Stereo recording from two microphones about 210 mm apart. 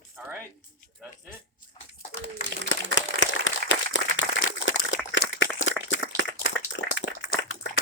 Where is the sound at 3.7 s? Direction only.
60° left (ahead or behind).